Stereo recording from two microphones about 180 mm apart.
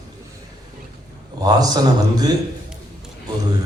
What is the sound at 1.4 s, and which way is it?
Speech, 20° right (ahead or behind).